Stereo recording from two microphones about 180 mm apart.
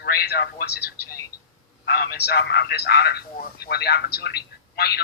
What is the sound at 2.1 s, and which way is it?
A man's voice, 60° left (ahead or behind).